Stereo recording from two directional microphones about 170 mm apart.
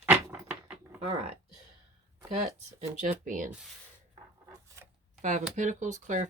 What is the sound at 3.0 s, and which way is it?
Speech, 50° right (ahead or behind).